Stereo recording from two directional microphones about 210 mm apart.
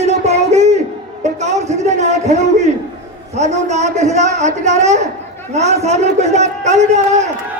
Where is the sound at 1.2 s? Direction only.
30° right (ahead or behind).